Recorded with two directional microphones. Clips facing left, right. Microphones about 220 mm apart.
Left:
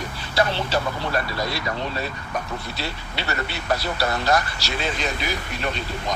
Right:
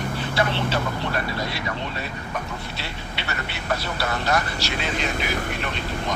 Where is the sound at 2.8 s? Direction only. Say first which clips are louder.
Left 3 dB; 35° left (ahead or behind).